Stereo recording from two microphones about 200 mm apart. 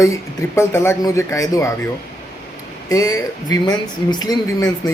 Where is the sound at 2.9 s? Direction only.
15° left (ahead or behind).